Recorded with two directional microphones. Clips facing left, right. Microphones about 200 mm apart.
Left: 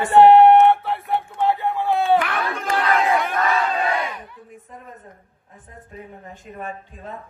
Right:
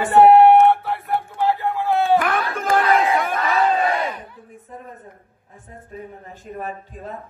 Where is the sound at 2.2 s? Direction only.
45° right (ahead or behind).